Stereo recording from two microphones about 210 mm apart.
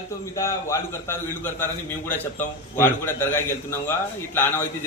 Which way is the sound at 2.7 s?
10° left (ahead or behind).